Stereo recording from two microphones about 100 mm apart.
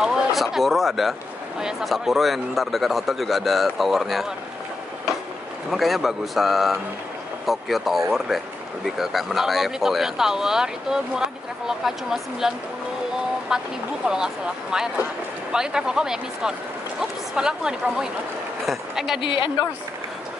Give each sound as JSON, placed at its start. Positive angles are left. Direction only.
{"t": 0.0, "sound": "speech", "side_deg": -5}
{"t": 5.7, "sound": "a woman's voice", "side_deg": 0}
{"t": 19.2, "sound": "a woman's voice", "side_deg": 55}